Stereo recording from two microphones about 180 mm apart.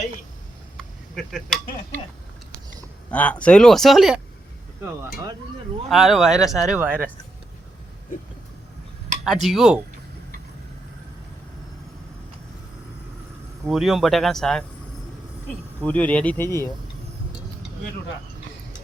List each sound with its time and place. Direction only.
0.8 s speech: centre (ahead or behind)
3.1 s speech: 5° left (ahead or behind)
4.8 s speech: 15° right (ahead or behind)
5.9 s speech: centre (ahead or behind)
9.2 s speech: centre (ahead or behind)
13.7 s speech: centre (ahead or behind)
15.8 s speech: 10° left (ahead or behind)